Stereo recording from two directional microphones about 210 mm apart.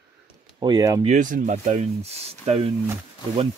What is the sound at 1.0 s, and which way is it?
Speech, 35° right (ahead or behind).